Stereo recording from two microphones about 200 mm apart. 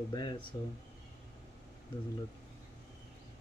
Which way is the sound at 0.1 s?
20° left (ahead or behind).